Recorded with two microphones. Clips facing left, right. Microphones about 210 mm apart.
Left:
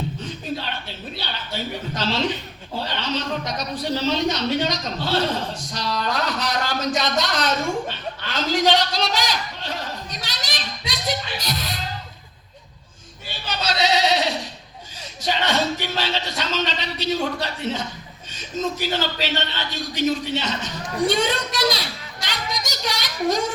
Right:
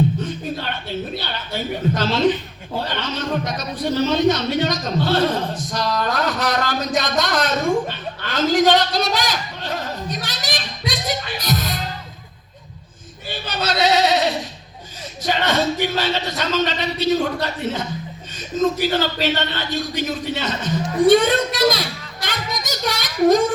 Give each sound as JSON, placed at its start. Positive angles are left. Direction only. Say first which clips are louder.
{"t": 1.2, "sound": "a man's voice", "louder": "right 3 dB", "side_deg": -50}
{"t": 13.5, "sound": "a sound", "louder": "right 3 dB", "side_deg": -50}
{"t": 15.3, "sound": "a man's voice", "louder": "right 3 dB", "side_deg": -50}